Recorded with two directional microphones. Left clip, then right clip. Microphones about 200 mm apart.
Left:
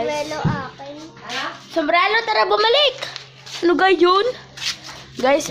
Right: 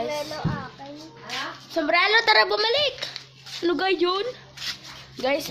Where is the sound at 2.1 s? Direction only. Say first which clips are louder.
Even; 35° right (ahead or behind).